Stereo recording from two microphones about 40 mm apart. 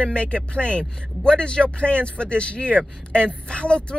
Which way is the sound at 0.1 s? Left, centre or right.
Left.